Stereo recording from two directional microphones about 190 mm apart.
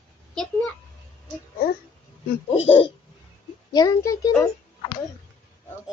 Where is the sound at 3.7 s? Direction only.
20° left (ahead or behind).